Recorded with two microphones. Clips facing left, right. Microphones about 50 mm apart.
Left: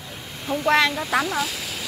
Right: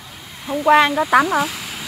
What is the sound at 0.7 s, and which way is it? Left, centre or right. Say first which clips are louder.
Speech: right 5 dB; right.